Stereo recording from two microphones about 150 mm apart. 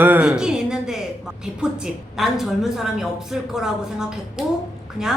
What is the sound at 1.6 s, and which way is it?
A woman's voice, 5° right (ahead or behind).